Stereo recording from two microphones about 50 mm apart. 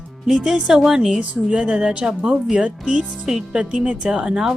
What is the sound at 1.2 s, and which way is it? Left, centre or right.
Speech, right.